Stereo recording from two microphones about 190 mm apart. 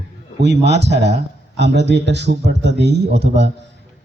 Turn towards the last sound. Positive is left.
turn(degrees=-65)  # may be behind; listen again after turning